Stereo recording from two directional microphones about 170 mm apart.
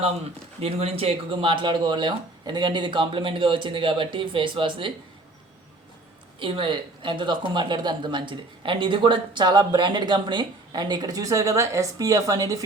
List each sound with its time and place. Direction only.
0.6 s speech: 35° right (ahead or behind)
6.4 s speech: 30° right (ahead or behind)